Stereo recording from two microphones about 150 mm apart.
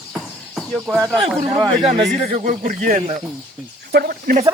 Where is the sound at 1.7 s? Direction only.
40° right (ahead or behind).